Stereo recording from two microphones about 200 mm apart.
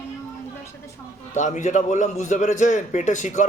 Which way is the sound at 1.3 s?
40° left (ahead or behind).